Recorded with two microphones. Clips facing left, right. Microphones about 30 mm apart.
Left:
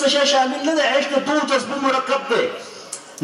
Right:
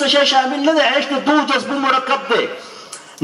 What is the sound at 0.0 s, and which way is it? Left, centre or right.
A man's voice, right.